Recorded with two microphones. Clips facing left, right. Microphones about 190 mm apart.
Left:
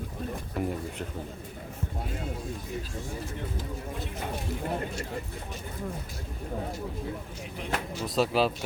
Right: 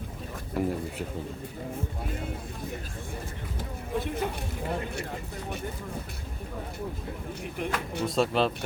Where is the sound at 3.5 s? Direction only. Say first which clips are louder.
Right 3 dB; 55° right (ahead or behind).